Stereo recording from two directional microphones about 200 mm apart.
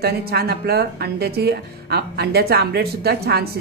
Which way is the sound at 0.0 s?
50° right (ahead or behind).